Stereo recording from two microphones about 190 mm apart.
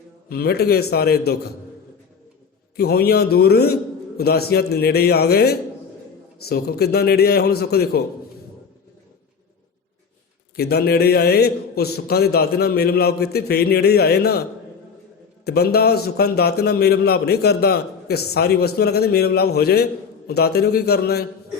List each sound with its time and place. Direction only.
0.3 s a man's voice: 55° left (ahead or behind)
2.7 s a man's voice: 55° left (ahead or behind)
10.5 s a man's voice: 55° left (ahead or behind)
15.4 s a man's voice: 55° left (ahead or behind)